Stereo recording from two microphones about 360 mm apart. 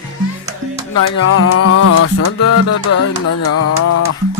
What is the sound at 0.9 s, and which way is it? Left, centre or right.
Music, left.